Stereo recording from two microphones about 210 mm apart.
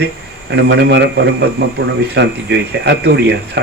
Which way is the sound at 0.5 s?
55° right (ahead or behind).